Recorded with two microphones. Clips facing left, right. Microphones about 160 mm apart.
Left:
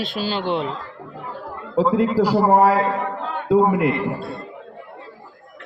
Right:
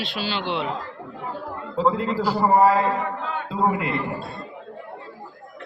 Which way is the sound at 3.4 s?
65° left (ahead or behind).